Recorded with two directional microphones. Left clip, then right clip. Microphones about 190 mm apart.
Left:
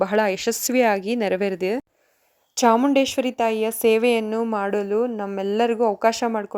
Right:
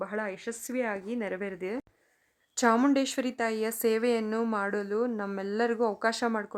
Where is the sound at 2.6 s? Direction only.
15° left (ahead or behind).